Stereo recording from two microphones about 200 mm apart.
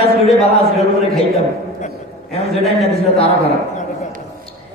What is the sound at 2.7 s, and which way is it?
A man's voice, 30° left (ahead or behind).